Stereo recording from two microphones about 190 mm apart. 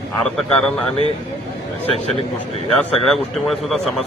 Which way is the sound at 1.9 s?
30° left (ahead or behind).